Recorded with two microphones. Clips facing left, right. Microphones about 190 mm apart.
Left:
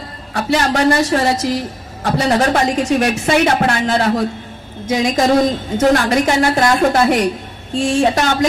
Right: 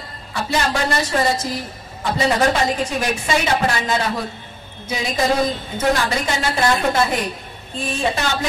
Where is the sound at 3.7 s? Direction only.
60° left (ahead or behind).